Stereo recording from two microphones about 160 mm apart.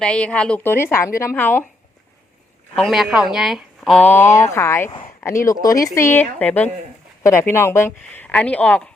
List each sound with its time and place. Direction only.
0.0 s a woman's voice: 5° left (ahead or behind)
2.7 s speech: centre (ahead or behind); by 4.9 s 15° left (ahead or behind)
4.9 s speech: 35° left (ahead or behind)
5.2 s a woman's voice: 20° left (ahead or behind)